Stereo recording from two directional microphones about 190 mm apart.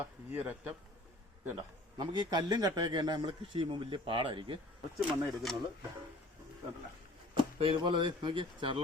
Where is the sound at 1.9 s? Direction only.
25° right (ahead or behind).